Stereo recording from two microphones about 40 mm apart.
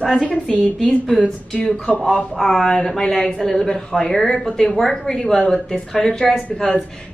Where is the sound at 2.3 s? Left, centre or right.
Centre.